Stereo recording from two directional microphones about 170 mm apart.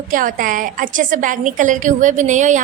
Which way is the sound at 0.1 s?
50° right (ahead or behind).